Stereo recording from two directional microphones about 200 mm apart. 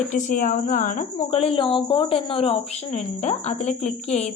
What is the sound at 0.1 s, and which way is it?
Speech, 40° left (ahead or behind).